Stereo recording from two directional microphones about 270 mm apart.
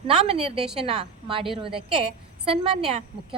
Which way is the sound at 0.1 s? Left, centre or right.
Centre.